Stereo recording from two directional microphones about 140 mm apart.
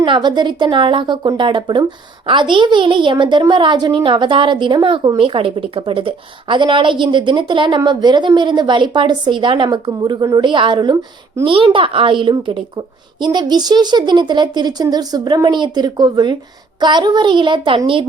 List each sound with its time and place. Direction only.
0.0 s a woman's voice: 35° right (ahead or behind)